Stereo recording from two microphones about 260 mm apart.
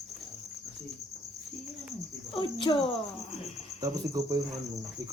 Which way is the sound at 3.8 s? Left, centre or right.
Centre.